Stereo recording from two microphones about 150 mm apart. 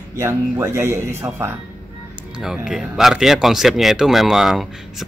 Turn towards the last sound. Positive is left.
turn(degrees=0)  # may be behind; listen again after turning